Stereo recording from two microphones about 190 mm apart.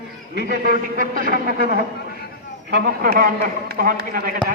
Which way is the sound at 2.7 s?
60° right (ahead or behind).